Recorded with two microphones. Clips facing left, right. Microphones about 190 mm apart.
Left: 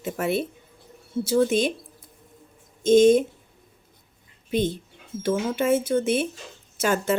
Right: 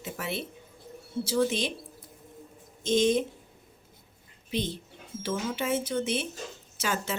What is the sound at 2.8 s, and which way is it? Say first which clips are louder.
Speech: left 9 dB; 50° left (ahead or behind).